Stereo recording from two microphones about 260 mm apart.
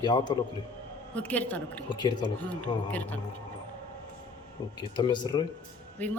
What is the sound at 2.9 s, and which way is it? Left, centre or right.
Speech, centre.